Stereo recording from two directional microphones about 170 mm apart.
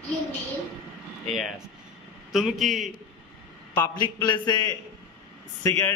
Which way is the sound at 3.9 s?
25° left (ahead or behind).